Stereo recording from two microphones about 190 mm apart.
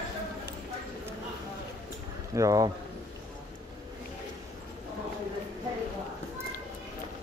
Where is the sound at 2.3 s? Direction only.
20° right (ahead or behind).